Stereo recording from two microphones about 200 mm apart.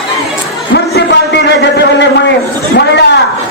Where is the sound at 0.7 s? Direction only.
60° left (ahead or behind).